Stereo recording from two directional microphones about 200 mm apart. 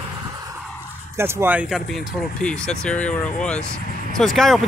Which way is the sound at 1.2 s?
10° right (ahead or behind).